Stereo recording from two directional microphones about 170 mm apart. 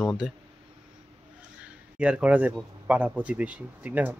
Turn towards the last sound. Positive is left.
turn(degrees=-10)  # may be behind; listen again after turning